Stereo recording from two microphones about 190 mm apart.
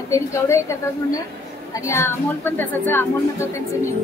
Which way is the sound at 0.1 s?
15° left (ahead or behind).